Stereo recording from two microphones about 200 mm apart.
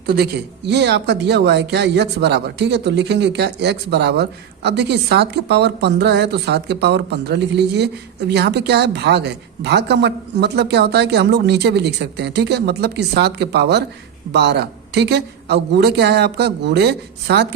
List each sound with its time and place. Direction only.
0.0 s speech: 50° right (ahead or behind)